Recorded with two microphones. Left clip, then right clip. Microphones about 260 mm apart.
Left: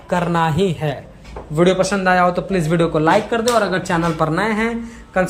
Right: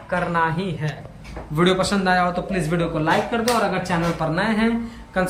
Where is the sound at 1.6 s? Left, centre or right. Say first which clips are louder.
Left 4 dB; centre.